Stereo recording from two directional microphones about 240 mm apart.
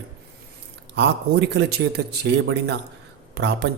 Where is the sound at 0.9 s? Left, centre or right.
Right.